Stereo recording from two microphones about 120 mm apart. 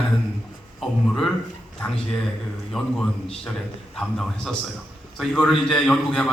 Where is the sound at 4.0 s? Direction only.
5° left (ahead or behind).